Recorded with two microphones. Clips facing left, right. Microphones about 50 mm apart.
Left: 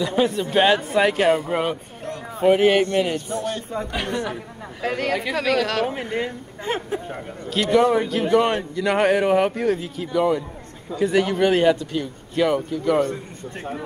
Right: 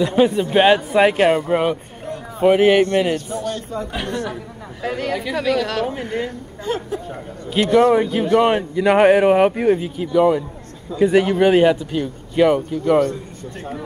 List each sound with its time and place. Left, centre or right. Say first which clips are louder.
0.0 s speech: right 5 dB; centre
1.4 s speech: right 5 dB; centre
3.4 s speech: right 2 dB; centre
4.8 s speech: even; centre
5.9 s speech: right 1 dB; centre
6.6 s speech: right 2 dB; left
7.6 s speech: right 4 dB; centre